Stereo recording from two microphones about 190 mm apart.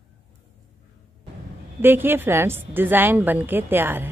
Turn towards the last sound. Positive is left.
turn(degrees=-10)  # may be behind; listen again after turning